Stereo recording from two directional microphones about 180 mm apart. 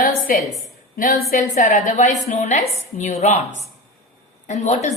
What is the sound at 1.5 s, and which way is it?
A woman's voice, 45° left (ahead or behind).